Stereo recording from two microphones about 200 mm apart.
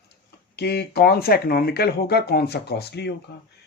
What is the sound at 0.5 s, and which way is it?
Speech, 55° left (ahead or behind).